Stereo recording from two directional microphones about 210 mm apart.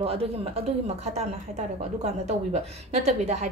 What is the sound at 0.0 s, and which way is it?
A woman's voice, 25° right (ahead or behind).